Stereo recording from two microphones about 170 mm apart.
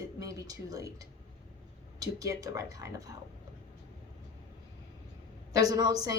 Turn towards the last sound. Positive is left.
turn(degrees=-25)  # may be behind; listen again after turning